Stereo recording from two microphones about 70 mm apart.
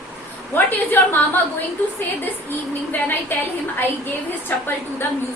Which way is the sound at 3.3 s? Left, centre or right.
Left.